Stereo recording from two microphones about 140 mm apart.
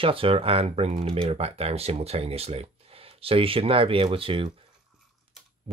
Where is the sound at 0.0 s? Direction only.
40° right (ahead or behind).